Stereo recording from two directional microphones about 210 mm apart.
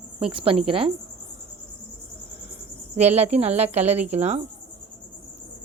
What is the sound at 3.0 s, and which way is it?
A woman's voice, 30° right (ahead or behind).